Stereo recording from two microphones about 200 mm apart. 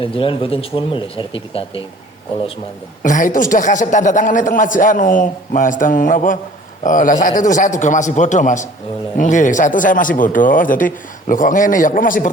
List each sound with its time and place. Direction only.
0.0 s speech: 25° left (ahead or behind)
3.0 s a man's voice: 40° left (ahead or behind)